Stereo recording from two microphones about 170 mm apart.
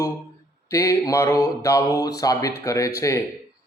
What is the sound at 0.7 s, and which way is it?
A man's voice, 20° left (ahead or behind).